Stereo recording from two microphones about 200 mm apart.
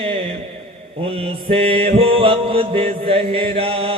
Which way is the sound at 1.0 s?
30° right (ahead or behind).